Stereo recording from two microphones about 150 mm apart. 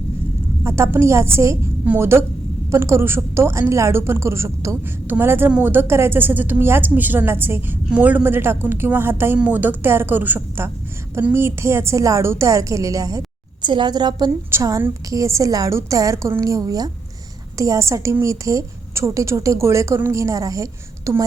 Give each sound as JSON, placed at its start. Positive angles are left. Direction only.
{"t": 0.6, "sound": "a woman's voice", "side_deg": -20}